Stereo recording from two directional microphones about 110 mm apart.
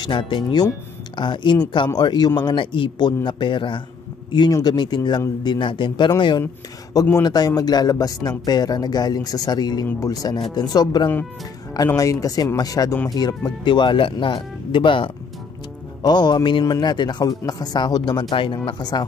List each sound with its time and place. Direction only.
0.0 s speech: 50° left (ahead or behind)
9.8 s speech: 25° left (ahead or behind)
13.7 s speech: 45° left (ahead or behind)
18.3 s speech: 50° left (ahead or behind)